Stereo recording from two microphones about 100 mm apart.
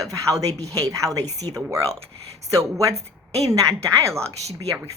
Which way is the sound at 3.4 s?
35° right (ahead or behind).